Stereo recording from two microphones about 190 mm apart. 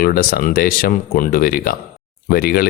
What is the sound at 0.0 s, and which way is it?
Speech, 50° left (ahead or behind).